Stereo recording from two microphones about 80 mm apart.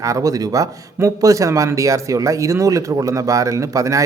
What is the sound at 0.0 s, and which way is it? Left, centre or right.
A man's voice, right.